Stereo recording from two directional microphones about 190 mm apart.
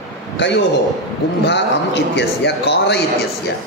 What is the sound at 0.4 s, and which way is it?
A man's voice, 75° left (ahead or behind).